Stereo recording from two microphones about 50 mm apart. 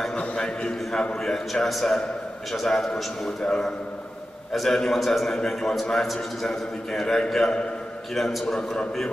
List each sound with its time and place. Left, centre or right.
0.1 s a sound: left
0.4 s a man's voice: centre
1.2 s a man's voice: centre
4.5 s a man's voice: centre